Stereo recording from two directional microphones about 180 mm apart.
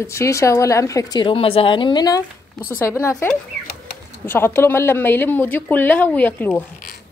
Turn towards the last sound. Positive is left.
turn(degrees=10)  # may be behind; listen again after turning